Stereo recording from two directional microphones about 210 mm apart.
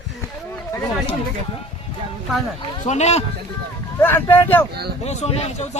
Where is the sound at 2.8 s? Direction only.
35° left (ahead or behind).